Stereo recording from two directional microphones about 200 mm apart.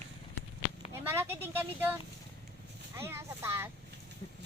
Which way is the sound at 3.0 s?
15° right (ahead or behind).